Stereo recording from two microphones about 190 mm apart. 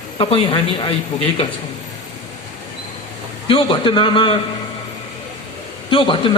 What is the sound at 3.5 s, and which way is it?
Speech, 25° left (ahead or behind).